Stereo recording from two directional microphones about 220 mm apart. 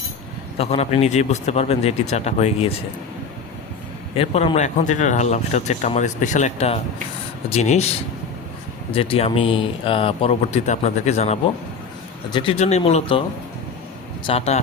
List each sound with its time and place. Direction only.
0.6 s speech: 30° left (ahead or behind)
4.1 s speech: 25° left (ahead or behind)
8.9 s speech: 25° left (ahead or behind)
14.3 s speech: 30° left (ahead or behind)